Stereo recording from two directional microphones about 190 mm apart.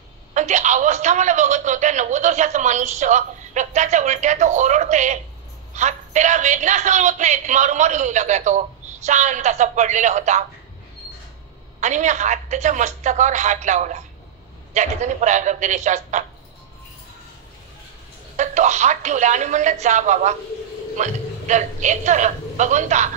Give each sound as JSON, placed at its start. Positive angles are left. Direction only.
{"t": 0.3, "sound": "a man's voice", "side_deg": -40}
{"t": 11.8, "sound": "a man's voice", "side_deg": -40}
{"t": 18.3, "sound": "a man's voice", "side_deg": -40}